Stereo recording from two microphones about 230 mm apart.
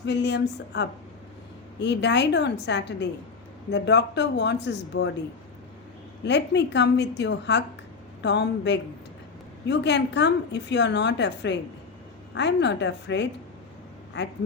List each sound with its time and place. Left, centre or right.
0.0 s a woman's voice: left
6.2 s a woman's voice: left